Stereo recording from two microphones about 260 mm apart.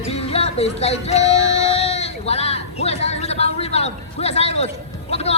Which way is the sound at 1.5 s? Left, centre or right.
Left.